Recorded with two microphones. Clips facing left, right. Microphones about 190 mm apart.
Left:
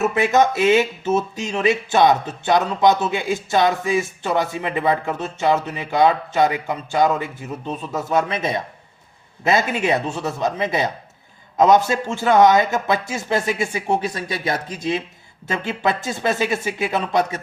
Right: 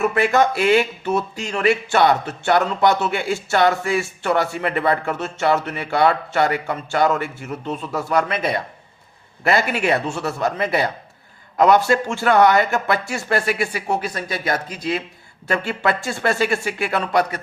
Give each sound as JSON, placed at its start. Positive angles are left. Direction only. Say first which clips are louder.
{"t": 0.0, "sound": "a man's voice", "louder": "even", "side_deg": 20}